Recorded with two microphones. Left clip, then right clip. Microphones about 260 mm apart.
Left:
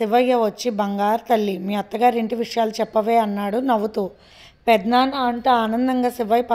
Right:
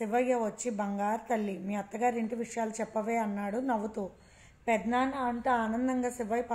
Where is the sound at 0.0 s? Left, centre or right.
Left.